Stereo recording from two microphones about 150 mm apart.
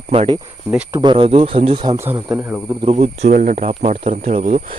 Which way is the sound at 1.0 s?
35° right (ahead or behind).